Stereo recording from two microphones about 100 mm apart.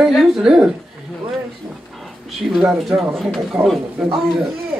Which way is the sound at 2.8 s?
Centre (ahead or behind).